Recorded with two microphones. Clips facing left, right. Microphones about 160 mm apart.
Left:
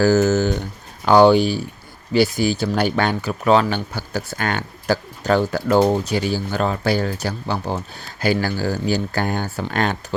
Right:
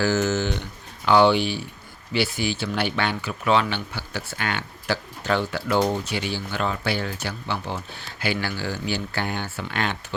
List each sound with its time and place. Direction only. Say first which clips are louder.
0.0 s speech: left 7 dB; 40° left (ahead or behind)